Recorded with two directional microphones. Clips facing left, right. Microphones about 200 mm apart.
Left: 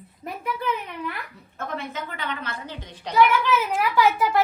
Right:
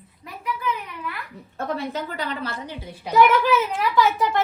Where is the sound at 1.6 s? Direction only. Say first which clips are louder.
Right 4 dB; 35° right (ahead or behind).